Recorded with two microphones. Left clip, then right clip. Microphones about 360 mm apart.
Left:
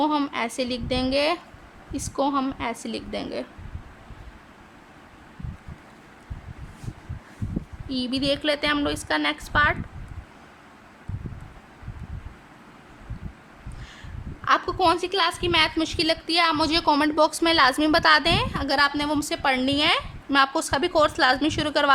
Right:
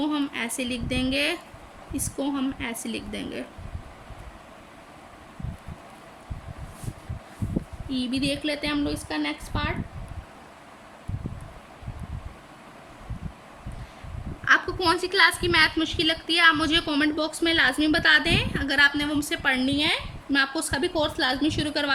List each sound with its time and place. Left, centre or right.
0.0 s a woman's voice: centre
7.9 s a woman's voice: centre
14.4 s a woman's voice: centre